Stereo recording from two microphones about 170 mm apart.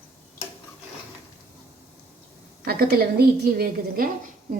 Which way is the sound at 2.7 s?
65° right (ahead or behind).